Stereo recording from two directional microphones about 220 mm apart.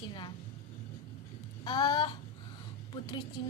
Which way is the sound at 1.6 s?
20° left (ahead or behind).